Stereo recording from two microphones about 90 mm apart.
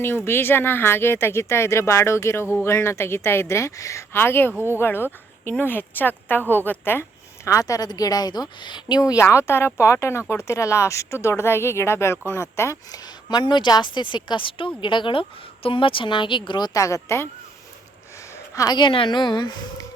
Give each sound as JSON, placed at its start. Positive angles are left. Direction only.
{"t": 0.3, "sound": "speech", "side_deg": 25}
{"t": 7.4, "sound": "speech", "side_deg": 35}
{"t": 9.0, "sound": "speech", "side_deg": 40}
{"t": 9.2, "sound": "speech", "side_deg": 30}
{"t": 12.9, "sound": "speech", "side_deg": 50}
{"t": 16.7, "sound": "speech", "side_deg": 35}
{"t": 18.7, "sound": "speech", "side_deg": 65}